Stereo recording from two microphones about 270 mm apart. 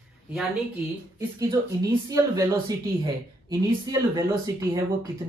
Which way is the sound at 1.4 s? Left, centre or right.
Centre.